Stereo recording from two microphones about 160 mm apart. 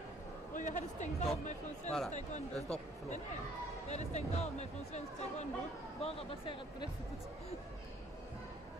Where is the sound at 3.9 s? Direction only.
45° left (ahead or behind).